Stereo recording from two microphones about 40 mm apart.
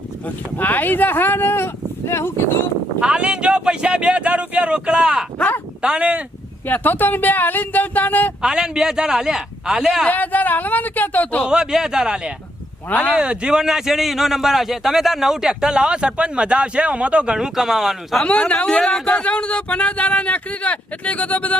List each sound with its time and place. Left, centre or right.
0.5 s speech: left
3.0 s speech: right
5.8 s speech: right
6.8 s speech: left
8.4 s a man's voice: centre
10.1 s speech: left
11.4 s a man's voice: centre
12.9 s speech: left
13.1 s a man's voice: right
17.3 s a man's voice: centre
18.3 s speech: left